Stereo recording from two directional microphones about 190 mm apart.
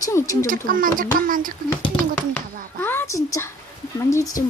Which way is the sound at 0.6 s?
45° right (ahead or behind).